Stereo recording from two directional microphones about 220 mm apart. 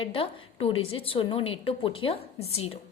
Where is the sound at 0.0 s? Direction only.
25° left (ahead or behind).